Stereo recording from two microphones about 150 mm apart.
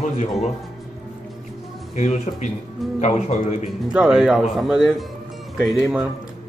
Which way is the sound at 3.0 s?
50° left (ahead or behind).